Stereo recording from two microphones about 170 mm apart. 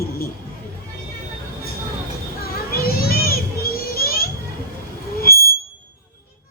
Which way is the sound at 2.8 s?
60° left (ahead or behind).